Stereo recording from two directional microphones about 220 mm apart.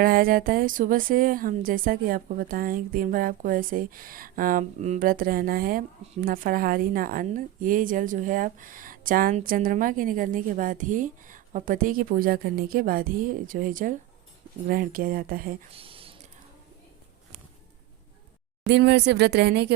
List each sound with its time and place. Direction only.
0.0 s a woman's voice: 40° right (ahead or behind)
15.7 s a sound: 25° right (ahead or behind)
18.7 s speech: 50° right (ahead or behind)